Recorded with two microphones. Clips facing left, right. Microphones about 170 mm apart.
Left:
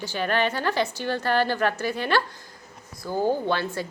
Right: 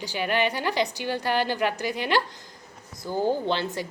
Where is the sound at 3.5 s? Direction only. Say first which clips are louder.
Left 1 dB; 20° right (ahead or behind).